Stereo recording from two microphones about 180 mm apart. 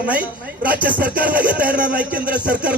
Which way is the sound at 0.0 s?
10° right (ahead or behind).